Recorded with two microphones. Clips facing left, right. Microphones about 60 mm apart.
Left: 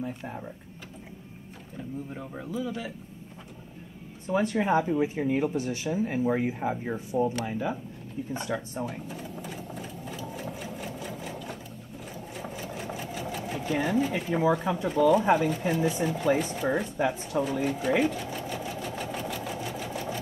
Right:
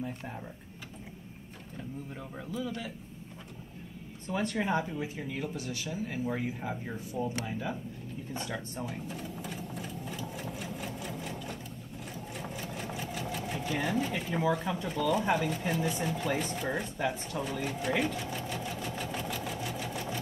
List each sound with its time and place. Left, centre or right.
0.0 s speech: centre
2.1 s speech: centre
4.3 s speech: centre
8.3 s a sound: centre
12.4 s sewing machine: centre
14.5 s speech: centre
16.7 s sewing machine: centre